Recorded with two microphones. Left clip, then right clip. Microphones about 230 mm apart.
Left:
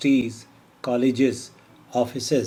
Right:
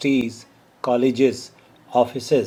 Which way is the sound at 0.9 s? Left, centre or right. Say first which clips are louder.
Right 3 dB; right.